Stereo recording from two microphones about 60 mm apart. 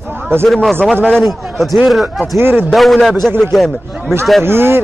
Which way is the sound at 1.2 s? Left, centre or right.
Centre.